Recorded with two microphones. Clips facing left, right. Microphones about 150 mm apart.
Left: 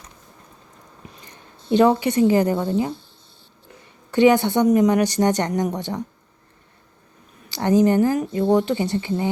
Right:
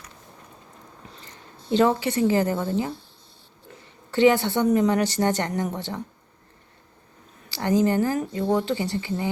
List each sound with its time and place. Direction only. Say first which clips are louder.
1.1 s a sound: even; 15° left (ahead or behind)
1.6 s speech: left 4 dB; 20° left (ahead or behind)
4.1 s a woman's voice: left 3 dB; 15° left (ahead or behind)
7.5 s speech: left 4 dB; 20° left (ahead or behind)